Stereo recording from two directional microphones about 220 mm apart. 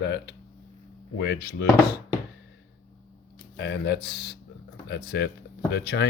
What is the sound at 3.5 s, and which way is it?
Speech, 50° left (ahead or behind).